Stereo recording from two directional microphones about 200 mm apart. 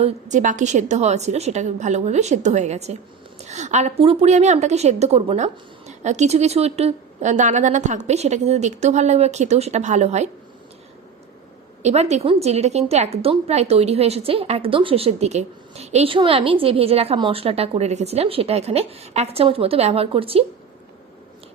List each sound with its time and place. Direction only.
0.0 s a woman's voice: 40° right (ahead or behind)
11.8 s a woman's voice: 35° right (ahead or behind)